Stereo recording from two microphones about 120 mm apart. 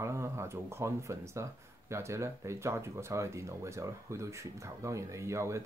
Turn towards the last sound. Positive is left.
turn(degrees=-25)  # may be behind; listen again after turning